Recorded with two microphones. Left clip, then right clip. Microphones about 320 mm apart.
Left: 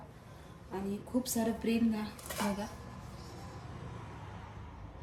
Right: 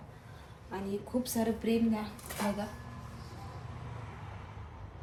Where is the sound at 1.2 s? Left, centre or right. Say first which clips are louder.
Right 1 dB; centre.